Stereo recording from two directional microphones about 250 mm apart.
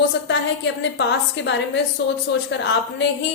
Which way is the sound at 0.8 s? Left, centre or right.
Left.